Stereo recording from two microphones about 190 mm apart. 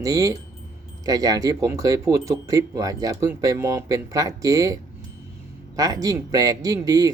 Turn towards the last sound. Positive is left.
turn(degrees=-20)  # may be behind; listen again after turning